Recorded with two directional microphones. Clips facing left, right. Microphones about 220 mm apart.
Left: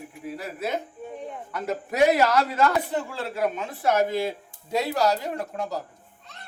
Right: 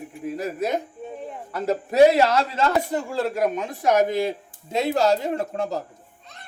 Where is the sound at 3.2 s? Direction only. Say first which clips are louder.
Right 5 dB; 40° right (ahead or behind).